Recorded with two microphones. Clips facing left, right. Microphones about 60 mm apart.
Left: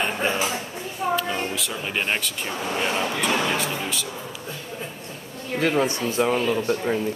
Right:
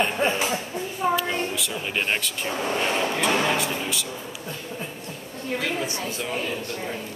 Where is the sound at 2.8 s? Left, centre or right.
Centre.